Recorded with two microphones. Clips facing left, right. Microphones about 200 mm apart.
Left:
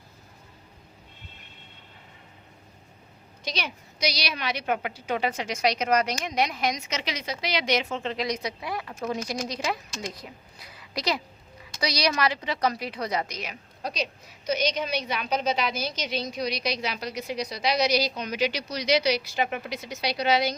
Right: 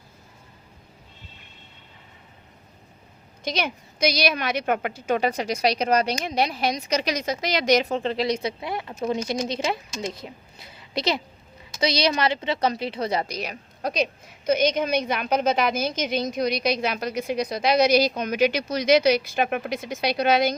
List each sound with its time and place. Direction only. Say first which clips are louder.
3.4 s a woman's voice: right 6 dB; 50° right (ahead or behind)